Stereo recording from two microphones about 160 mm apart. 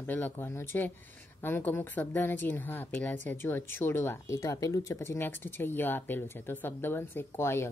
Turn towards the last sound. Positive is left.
turn(degrees=15)  # may be behind; listen again after turning